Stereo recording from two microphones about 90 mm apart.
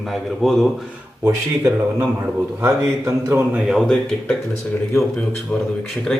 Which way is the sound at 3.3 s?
20° right (ahead or behind).